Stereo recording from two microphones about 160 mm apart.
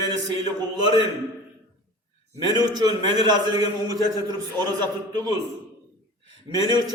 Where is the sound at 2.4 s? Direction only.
25° right (ahead or behind).